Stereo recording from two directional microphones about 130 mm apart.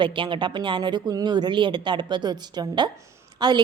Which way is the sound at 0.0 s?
40° right (ahead or behind).